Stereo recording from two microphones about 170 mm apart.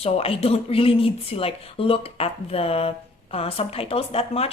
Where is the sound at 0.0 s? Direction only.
35° left (ahead or behind).